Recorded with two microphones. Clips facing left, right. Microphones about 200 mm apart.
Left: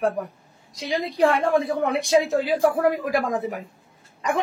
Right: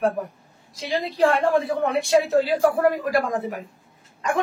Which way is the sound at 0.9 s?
20° left (ahead or behind).